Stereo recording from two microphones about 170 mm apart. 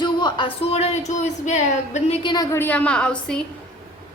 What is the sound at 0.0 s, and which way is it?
Speech, 25° left (ahead or behind).